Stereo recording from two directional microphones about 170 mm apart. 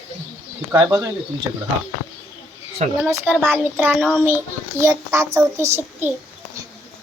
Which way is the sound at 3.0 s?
10° right (ahead or behind).